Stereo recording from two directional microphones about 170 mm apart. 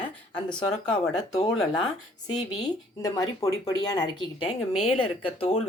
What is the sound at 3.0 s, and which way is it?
Speech, 20° left (ahead or behind).